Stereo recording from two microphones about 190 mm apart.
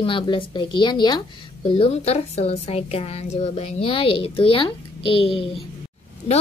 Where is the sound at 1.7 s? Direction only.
35° left (ahead or behind).